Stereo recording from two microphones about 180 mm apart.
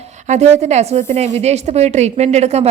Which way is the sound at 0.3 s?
40° right (ahead or behind).